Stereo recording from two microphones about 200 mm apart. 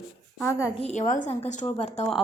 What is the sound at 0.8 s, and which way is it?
Speech, 40° left (ahead or behind).